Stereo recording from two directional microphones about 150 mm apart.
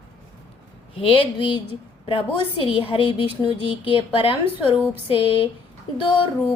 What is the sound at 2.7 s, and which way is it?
A woman's voice, 35° left (ahead or behind).